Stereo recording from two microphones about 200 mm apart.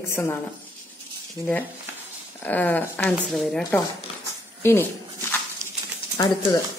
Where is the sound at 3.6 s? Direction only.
15° left (ahead or behind).